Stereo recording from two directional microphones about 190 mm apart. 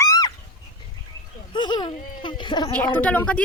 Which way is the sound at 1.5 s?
25° left (ahead or behind).